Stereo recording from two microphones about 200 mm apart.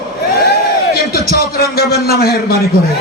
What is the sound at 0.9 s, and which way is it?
A man's voice, 50° left (ahead or behind).